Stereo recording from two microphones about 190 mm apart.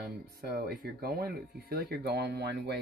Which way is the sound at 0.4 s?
55° right (ahead or behind).